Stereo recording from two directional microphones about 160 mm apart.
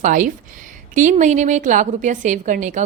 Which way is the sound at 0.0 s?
55° right (ahead or behind).